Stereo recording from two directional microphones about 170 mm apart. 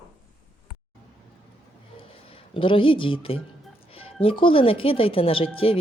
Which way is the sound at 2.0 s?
30° left (ahead or behind).